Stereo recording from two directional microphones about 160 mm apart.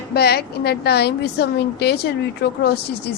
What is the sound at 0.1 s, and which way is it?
A woman's voice, 85° left.